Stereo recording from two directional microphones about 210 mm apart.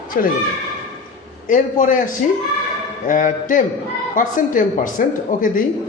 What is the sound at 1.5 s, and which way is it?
Speech, 40° left (ahead or behind).